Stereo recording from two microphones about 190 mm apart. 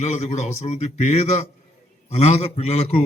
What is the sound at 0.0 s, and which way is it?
A man's voice, 35° left (ahead or behind).